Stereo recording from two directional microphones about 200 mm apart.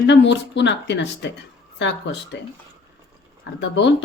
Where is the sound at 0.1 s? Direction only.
60° left (ahead or behind).